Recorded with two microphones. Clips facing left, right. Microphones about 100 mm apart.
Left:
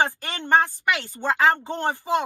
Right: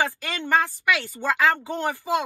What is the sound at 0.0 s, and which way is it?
Speech, 20° left (ahead or behind).